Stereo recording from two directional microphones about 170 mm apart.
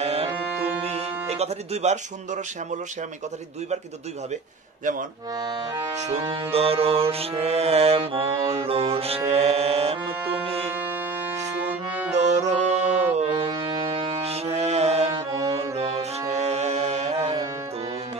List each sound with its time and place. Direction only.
0.0 s music: 35° right (ahead or behind)
0.8 s speech: 40° right (ahead or behind)
5.9 s music: 40° right (ahead or behind)
10.7 s music: 10° right (ahead or behind)
12.2 s music: 45° right (ahead or behind)